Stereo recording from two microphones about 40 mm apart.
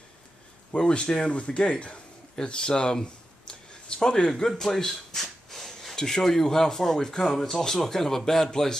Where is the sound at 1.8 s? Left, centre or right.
Left.